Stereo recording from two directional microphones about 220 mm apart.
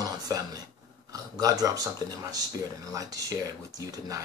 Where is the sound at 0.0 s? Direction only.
15° right (ahead or behind).